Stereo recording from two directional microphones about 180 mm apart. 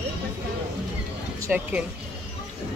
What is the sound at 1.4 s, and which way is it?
Speech, 10° right (ahead or behind).